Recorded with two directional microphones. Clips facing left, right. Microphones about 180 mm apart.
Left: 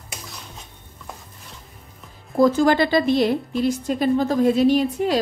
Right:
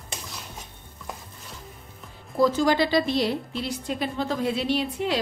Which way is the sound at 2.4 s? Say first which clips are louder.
Left 4 dB; 55° left (ahead or behind).